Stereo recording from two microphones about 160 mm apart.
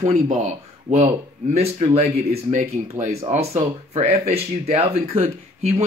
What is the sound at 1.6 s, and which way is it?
Speech, 40° right (ahead or behind).